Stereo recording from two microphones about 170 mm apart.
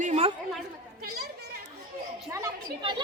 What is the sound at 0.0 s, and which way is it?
Chatter, 40° right (ahead or behind).